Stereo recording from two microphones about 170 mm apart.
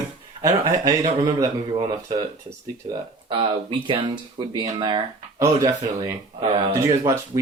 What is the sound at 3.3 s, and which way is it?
Speech, 30° right (ahead or behind).